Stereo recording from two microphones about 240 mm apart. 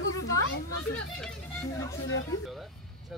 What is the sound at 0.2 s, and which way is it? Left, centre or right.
Children playing, left.